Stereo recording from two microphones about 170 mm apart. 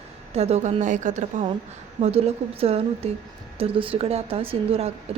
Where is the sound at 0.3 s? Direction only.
40° right (ahead or behind).